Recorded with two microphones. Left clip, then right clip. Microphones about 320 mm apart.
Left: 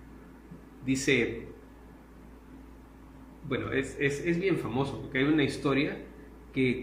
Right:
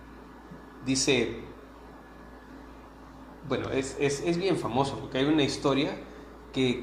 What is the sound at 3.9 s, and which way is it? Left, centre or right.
A man's voice, centre.